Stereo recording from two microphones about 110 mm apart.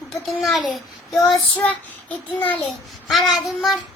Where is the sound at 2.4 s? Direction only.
15° left (ahead or behind).